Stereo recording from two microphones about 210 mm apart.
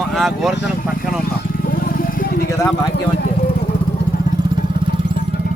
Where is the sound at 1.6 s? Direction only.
40° left (ahead or behind).